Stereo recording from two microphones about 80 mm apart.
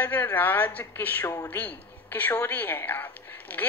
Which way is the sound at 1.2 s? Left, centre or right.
Left.